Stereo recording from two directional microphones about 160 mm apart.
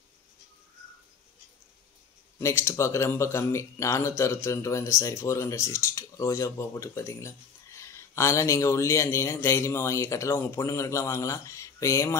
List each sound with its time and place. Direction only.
2.4 s speech: 15° left (ahead or behind)